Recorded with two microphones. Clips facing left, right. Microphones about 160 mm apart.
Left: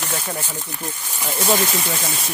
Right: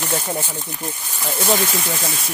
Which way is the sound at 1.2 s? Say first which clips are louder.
Even; centre (ahead or behind).